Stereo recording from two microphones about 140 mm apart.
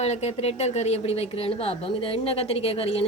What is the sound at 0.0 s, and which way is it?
Speech, 50° left (ahead or behind).